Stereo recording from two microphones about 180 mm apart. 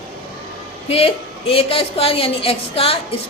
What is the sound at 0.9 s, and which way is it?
A woman's voice, 35° left (ahead or behind).